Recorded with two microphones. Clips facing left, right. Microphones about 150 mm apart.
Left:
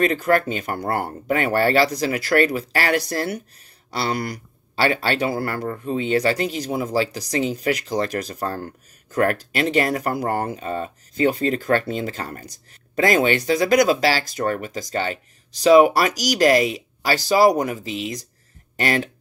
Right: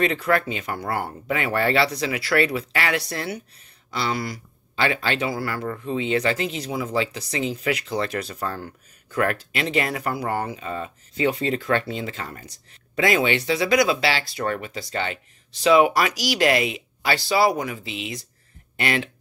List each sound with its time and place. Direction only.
0.0 s speech: 45° left (ahead or behind)